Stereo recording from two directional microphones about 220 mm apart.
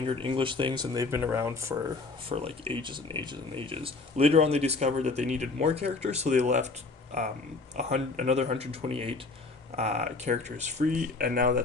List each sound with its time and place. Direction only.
0.2 s speech: 25° right (ahead or behind)
2.3 s speech: 25° right (ahead or behind)